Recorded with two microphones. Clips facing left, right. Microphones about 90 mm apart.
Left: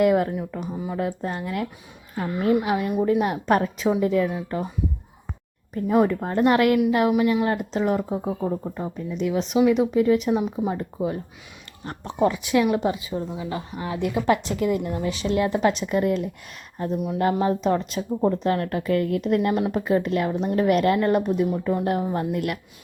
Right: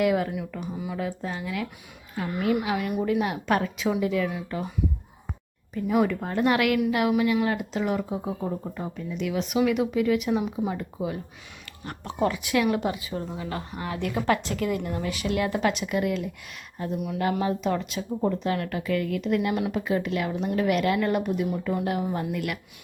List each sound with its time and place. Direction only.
0.0 s a woman's voice: 40° left (ahead or behind)
0.9 s speech: 50° left (ahead or behind)
2.1 s a woman's voice: 35° left (ahead or behind)
5.7 s a woman's voice: 35° left (ahead or behind)
8.4 s a woman's voice: 25° left (ahead or behind); by 22.5 s 45° left (ahead or behind)